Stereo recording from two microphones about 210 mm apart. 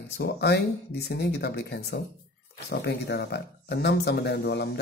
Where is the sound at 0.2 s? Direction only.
50° left (ahead or behind).